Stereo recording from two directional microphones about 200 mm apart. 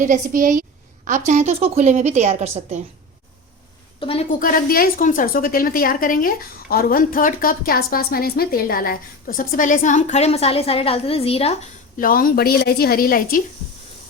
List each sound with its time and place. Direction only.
0.0 s a woman's voice: 40° right (ahead or behind)
4.0 s a woman's voice: 30° left (ahead or behind)
4.3 s a woman's voice: 45° left (ahead or behind)
11.9 s a woman's voice: 45° left (ahead or behind)